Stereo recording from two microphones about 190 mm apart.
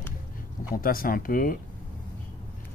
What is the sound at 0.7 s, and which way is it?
Speech, 50° left (ahead or behind).